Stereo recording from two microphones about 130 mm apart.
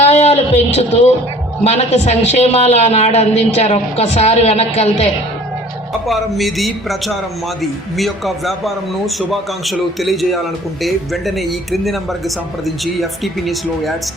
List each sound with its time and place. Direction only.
0.0 s a woman's voice: 55° left (ahead or behind)
6.1 s speech: centre (ahead or behind)